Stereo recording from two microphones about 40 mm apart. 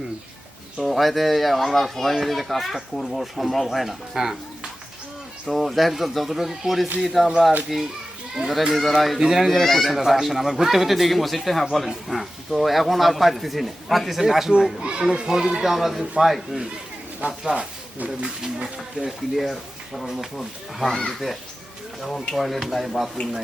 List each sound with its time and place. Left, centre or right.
0.8 s speech: centre
5.5 s a child's voice: centre
8.7 s speech: centre
9.1 s a child's voice: centre
9.5 s speech: centre
14.8 s a child's voice: right; by 16.6 s centre
17.5 s a child's voice: centre
19.4 s speech: centre